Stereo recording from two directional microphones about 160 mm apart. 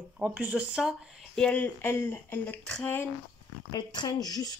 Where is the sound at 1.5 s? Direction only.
10° left (ahead or behind).